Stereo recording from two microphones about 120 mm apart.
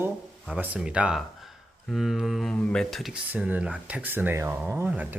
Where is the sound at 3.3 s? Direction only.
15° right (ahead or behind).